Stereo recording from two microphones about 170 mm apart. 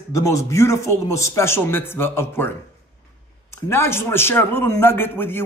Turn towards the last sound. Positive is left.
turn(degrees=15)  # may be behind; listen again after turning